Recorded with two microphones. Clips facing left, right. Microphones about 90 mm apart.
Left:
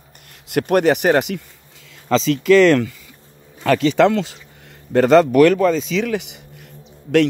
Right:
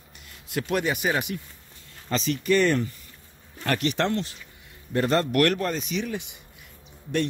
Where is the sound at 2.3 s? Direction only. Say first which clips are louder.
Left 9 dB; 90° left.